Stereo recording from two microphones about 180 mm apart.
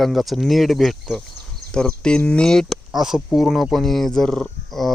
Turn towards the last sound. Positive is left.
turn(degrees=0)  # may be behind; listen again after turning